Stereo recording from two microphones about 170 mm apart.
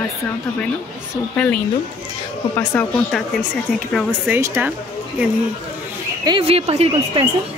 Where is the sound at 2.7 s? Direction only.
10° left (ahead or behind).